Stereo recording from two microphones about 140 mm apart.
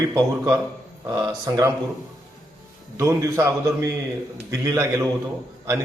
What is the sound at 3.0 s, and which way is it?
Speech, 20° right (ahead or behind).